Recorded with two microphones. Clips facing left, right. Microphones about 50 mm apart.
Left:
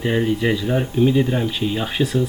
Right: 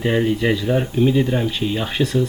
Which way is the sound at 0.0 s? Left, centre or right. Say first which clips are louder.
Right 1 dB; centre.